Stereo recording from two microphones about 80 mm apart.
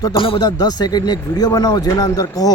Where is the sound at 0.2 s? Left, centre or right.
Left.